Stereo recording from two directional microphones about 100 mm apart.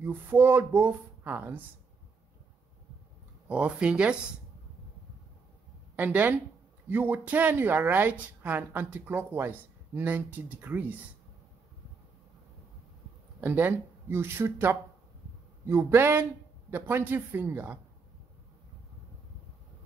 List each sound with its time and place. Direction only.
0.0 s speech: 20° right (ahead or behind)
3.4 s speech: 10° right (ahead or behind)
5.9 s speech: 15° right (ahead or behind)
13.4 s speech: 20° right (ahead or behind)